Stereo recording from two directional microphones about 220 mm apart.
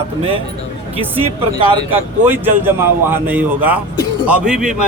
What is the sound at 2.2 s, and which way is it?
A man's voice, 10° right (ahead or behind).